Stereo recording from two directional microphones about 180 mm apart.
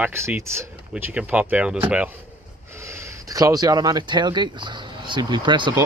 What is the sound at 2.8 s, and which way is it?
Speech, 20° right (ahead or behind).